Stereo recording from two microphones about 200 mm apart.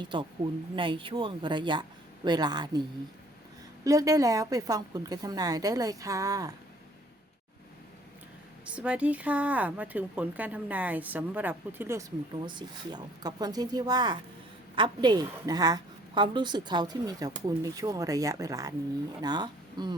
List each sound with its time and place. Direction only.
0.8 s a woman's voice: 25° right (ahead or behind)
3.8 s a woman's voice: 15° right (ahead or behind)
8.6 s a woman's voice: 5° right (ahead or behind)